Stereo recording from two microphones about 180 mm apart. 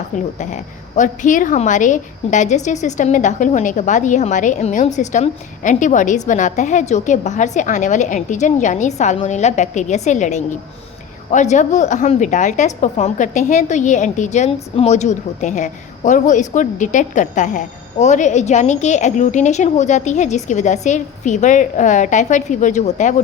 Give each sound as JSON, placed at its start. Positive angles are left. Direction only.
{"t": 0.3, "sound": "a woman's voice", "side_deg": 40}